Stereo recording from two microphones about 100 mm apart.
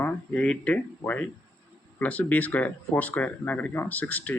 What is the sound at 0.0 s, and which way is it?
Speech, 10° left (ahead or behind).